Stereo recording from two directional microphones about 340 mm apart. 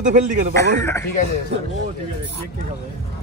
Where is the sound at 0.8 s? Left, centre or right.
Centre.